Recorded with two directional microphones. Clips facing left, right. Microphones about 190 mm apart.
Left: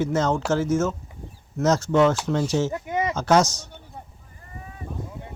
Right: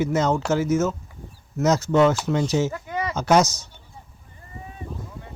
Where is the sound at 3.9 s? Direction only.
60° left (ahead or behind).